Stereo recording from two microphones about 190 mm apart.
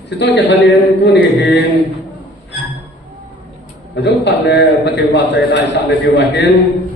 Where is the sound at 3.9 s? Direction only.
65° left (ahead or behind).